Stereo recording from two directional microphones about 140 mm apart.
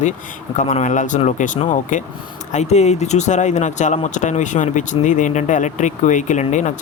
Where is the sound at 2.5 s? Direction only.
50° left (ahead or behind).